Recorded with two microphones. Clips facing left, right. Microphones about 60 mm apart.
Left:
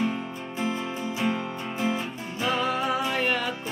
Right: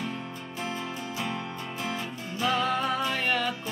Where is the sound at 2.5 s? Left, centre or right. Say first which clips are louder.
Left 2 dB; centre.